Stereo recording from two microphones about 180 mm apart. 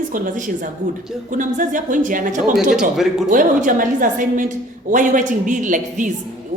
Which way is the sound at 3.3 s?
45° right (ahead or behind).